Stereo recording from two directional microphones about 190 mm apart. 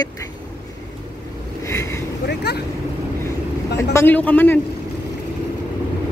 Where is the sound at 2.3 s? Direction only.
60° left (ahead or behind).